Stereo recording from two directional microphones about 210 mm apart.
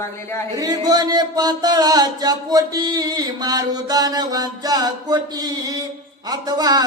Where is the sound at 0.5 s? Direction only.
15° right (ahead or behind).